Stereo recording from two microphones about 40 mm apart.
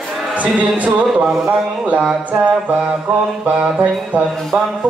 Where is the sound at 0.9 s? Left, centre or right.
Right.